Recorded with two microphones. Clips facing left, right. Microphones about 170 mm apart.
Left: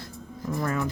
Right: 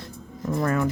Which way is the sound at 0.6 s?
65° right (ahead or behind).